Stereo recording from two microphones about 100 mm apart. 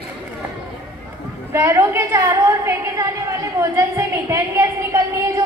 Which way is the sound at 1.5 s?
25° right (ahead or behind).